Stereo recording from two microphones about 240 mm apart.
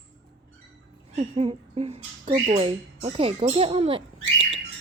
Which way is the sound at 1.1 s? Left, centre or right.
Right.